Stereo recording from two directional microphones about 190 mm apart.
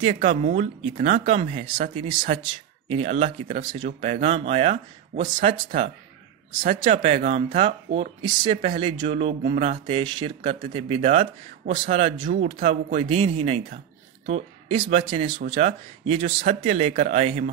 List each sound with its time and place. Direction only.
0.0 s speech: 35° right (ahead or behind)